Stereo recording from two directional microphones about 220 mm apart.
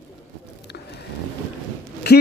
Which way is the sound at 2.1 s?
50° left (ahead or behind).